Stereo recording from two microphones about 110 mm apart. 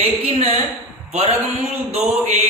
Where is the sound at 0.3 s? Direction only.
60° right (ahead or behind).